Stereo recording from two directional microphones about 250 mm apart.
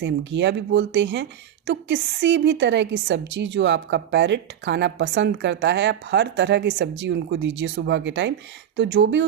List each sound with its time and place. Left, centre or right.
0.0 s speech: right